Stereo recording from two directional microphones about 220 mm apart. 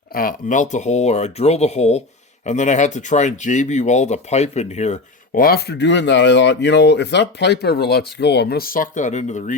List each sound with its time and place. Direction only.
0.1 s speech: 40° left (ahead or behind)